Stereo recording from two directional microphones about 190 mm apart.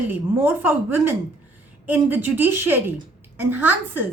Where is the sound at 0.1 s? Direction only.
10° right (ahead or behind).